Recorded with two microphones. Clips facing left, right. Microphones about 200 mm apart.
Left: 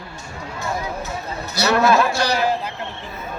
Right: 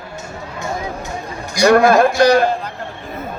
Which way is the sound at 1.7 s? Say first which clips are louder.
Right 5 dB; 50° right (ahead or behind).